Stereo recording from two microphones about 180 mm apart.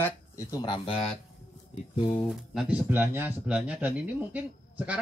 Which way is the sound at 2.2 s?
Centre (ahead or behind).